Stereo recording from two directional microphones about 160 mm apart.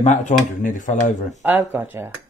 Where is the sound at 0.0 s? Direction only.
45° left (ahead or behind).